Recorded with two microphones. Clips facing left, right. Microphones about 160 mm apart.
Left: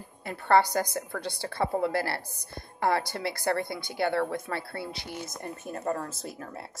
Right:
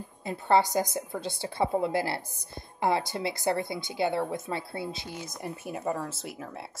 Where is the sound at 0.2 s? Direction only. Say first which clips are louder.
Left 1 dB; 20° right (ahead or behind).